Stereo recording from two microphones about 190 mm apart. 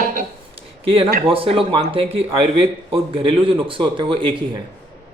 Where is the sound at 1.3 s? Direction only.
30° right (ahead or behind).